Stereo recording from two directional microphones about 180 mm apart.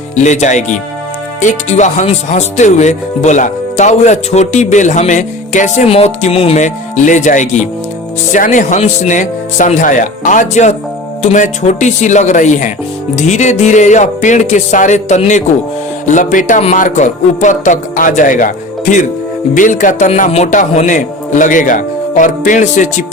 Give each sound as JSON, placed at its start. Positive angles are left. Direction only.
{"t": 0.2, "sound": "speech", "side_deg": 40}